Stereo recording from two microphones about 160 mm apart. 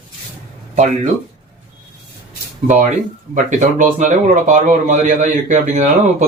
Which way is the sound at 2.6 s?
50° right (ahead or behind).